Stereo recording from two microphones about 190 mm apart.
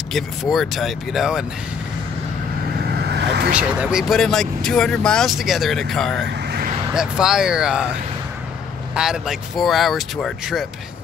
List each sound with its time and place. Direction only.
0.1 s speech: centre (ahead or behind)
2.9 s vehicle: 60° right (ahead or behind)
3.5 s speech: 5° right (ahead or behind)
8.9 s speech: 5° right (ahead or behind)